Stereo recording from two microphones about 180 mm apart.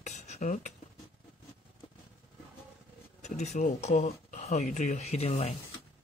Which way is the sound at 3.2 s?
40° left (ahead or behind).